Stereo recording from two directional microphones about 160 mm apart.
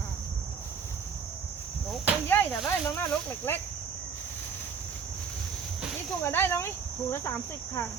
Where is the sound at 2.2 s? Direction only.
10° left (ahead or behind).